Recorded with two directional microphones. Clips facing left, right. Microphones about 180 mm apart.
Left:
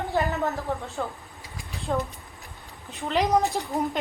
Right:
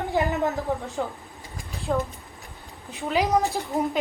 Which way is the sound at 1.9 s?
Centre (ahead or behind).